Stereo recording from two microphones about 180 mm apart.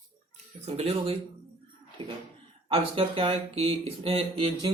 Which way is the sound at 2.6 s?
30° right (ahead or behind).